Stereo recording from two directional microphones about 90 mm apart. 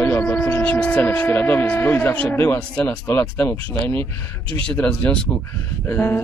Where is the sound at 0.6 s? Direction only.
15° left (ahead or behind).